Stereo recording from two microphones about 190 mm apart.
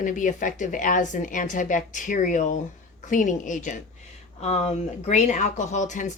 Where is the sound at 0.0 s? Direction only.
45° left (ahead or behind).